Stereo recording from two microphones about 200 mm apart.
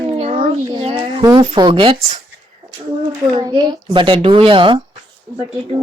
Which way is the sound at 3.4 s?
20° right (ahead or behind).